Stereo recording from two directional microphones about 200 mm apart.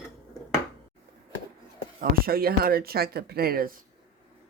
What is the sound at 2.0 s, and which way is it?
Speech, 50° right (ahead or behind).